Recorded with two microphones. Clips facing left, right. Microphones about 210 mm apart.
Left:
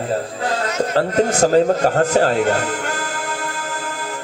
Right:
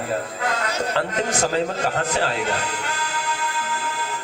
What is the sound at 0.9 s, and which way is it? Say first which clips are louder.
Speech: left 9 dB; 40° left (ahead or behind).